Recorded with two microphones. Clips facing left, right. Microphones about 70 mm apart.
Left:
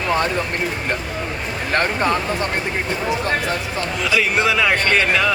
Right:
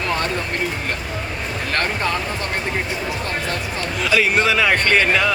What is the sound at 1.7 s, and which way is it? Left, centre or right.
Speech, left.